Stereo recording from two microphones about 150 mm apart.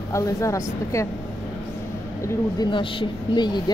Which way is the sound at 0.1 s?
20° left (ahead or behind).